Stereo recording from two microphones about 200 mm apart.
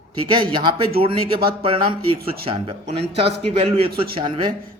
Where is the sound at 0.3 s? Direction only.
25° right (ahead or behind).